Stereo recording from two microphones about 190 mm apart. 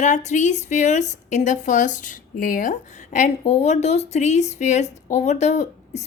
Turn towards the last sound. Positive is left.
turn(degrees=35)  # may be behind; listen again after turning